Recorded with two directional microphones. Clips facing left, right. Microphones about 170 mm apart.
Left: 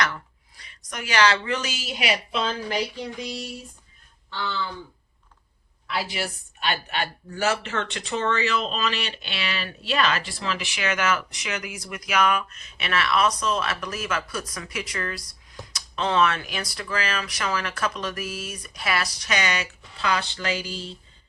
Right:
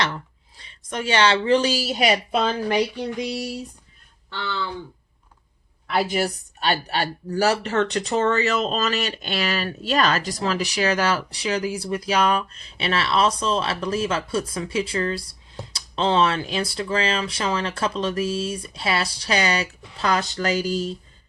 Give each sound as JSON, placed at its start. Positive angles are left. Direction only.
{"t": 0.0, "sound": "speech", "side_deg": -25}
{"t": 2.4, "sound": "speech", "side_deg": -60}
{"t": 3.2, "sound": "a sound", "side_deg": -75}
{"t": 5.9, "sound": "speech", "side_deg": -50}